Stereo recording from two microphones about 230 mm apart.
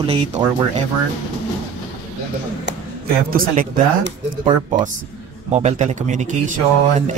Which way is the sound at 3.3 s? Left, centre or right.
Right.